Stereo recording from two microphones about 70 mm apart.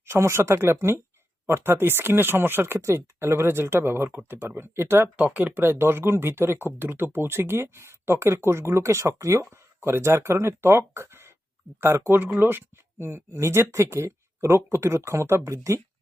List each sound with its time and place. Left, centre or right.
0.0 s speech: right
5.1 s speech: right